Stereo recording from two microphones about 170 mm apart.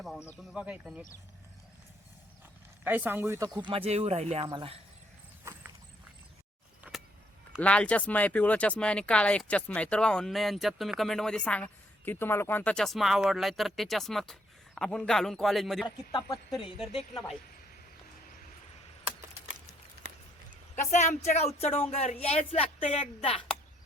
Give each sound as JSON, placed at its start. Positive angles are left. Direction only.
{"t": 0.0, "sound": "a sound", "side_deg": 0}
{"t": 0.5, "sound": "speech", "side_deg": -5}
{"t": 2.8, "sound": "speech", "side_deg": -10}
{"t": 4.4, "sound": "speech", "side_deg": -30}
{"t": 5.5, "sound": "walk", "side_deg": -15}
{"t": 6.8, "sound": "vehicle", "side_deg": -5}
{"t": 7.6, "sound": "speech", "side_deg": 5}
{"t": 20.7, "sound": "speech", "side_deg": 45}